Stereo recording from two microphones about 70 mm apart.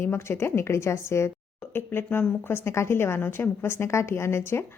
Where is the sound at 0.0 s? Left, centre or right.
Left.